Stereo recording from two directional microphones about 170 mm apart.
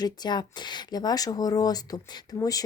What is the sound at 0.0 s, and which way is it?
Speech, 25° left (ahead or behind).